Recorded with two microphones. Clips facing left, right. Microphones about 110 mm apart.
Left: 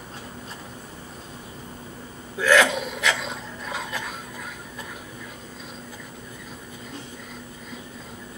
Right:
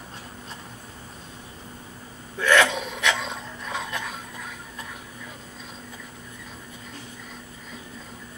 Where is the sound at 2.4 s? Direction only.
5° left (ahead or behind).